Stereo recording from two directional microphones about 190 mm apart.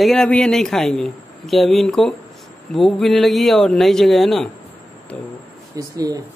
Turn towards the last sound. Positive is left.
turn(degrees=-20)  # may be behind; listen again after turning